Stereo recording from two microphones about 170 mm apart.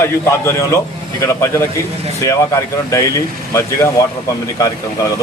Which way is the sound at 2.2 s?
20° left (ahead or behind).